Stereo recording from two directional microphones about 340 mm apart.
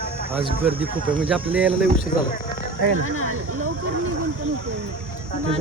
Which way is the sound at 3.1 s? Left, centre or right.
Right.